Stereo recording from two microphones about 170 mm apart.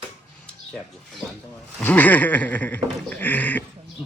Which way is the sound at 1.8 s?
10° left (ahead or behind).